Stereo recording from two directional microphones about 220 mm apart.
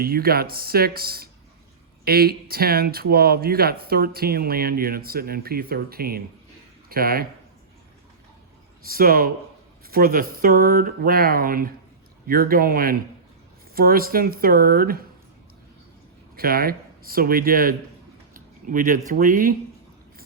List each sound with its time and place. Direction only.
0.0 s speech: 45° right (ahead or behind)
8.9 s speech: 40° right (ahead or behind)
16.3 s a man's voice: 40° right (ahead or behind)